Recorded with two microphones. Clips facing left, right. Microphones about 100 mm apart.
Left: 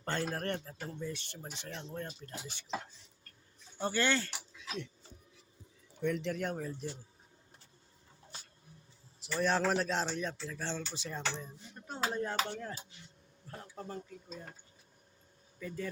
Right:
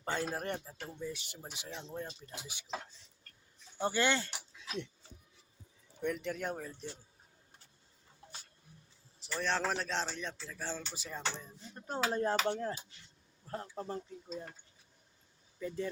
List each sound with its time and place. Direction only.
0.0 s a man's voice: 5° right (ahead or behind)
3.8 s a man's voice: 15° right (ahead or behind)
6.0 s a man's voice: 5° right (ahead or behind)
9.2 s a man's voice: 5° left (ahead or behind)
11.9 s a sound: 35° right (ahead or behind)
12.5 s speech: 30° right (ahead or behind)
15.6 s speech: 25° right (ahead or behind)